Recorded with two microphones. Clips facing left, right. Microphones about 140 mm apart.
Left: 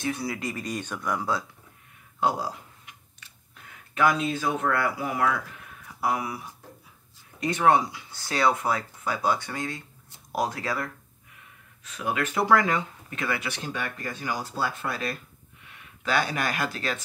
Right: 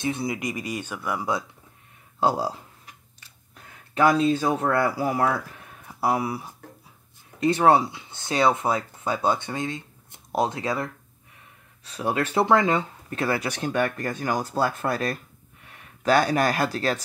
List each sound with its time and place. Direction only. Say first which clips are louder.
0.0 s speech: right 3 dB; 20° right (ahead or behind); by 1.3 s 5° right (ahead or behind)
2.1 s a sound: right 3 dB; 30° right (ahead or behind)
3.9 s speech: right 4 dB; 35° right (ahead or behind)
11.8 s speech: right 3 dB; 35° right (ahead or behind)
13.1 s speech: right 5 dB; 35° right (ahead or behind)